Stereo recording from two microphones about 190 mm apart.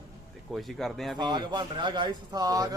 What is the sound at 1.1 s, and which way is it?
Speech, 20° right (ahead or behind).